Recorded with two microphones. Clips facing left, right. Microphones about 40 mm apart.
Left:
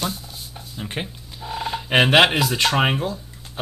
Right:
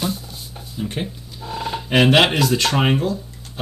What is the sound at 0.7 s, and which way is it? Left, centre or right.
Speech, left.